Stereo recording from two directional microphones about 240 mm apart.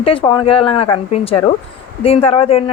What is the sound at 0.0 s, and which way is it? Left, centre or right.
A woman's voice, left.